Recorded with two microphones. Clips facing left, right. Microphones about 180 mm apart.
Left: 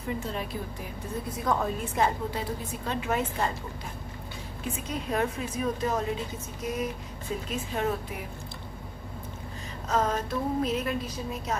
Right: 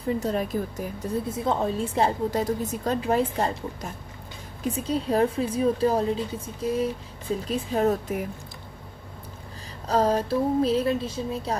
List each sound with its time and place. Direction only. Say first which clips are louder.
0.2 s a woman's voice: right 7 dB; 45° right (ahead or behind)
1.3 s a woman's voice: right 1 dB; 25° right (ahead or behind); by 8.3 s 40° right (ahead or behind)
9.8 s a woman's voice: right 5 dB; 35° right (ahead or behind)